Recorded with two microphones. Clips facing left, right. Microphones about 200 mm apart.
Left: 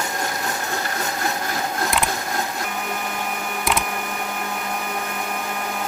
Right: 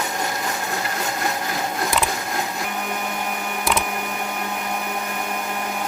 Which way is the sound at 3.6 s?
Centre (ahead or behind).